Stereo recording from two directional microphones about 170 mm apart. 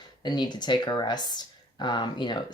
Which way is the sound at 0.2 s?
25° left (ahead or behind).